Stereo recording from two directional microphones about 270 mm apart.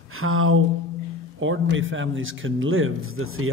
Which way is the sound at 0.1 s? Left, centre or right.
Right.